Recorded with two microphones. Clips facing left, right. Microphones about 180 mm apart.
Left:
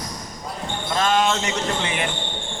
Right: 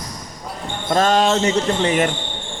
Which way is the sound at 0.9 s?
40° right (ahead or behind).